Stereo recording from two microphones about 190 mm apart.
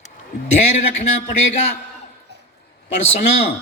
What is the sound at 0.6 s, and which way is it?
Speech, 35° left (ahead or behind).